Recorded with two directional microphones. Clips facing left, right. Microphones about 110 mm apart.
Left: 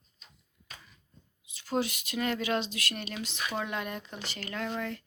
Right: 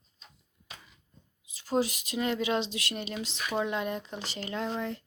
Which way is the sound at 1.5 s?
35° right (ahead or behind).